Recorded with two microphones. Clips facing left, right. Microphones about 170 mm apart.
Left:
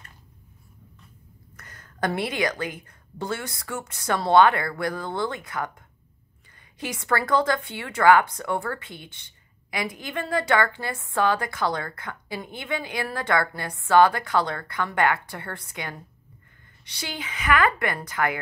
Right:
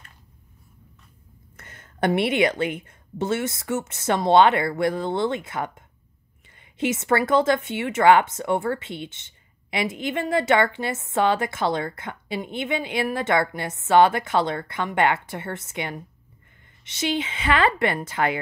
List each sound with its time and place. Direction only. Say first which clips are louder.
1.6 s speech: right 4 dB; 25° right (ahead or behind)